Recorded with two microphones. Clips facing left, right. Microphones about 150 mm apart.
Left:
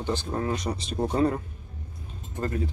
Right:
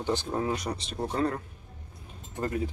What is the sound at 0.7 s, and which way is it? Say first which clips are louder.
Speech: left 4 dB; 10° left (ahead or behind).